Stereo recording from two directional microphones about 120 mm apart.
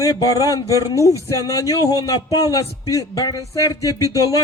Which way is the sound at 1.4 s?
30° left (ahead or behind).